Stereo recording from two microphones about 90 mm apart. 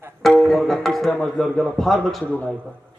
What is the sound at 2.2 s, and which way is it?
Speech, 15° left (ahead or behind).